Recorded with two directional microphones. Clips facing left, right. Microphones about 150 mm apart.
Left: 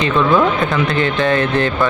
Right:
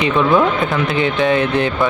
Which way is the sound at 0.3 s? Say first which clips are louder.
Even; centre (ahead or behind).